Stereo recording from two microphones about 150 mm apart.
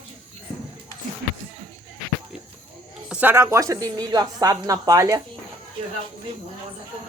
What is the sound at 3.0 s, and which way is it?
Speech, 10° right (ahead or behind).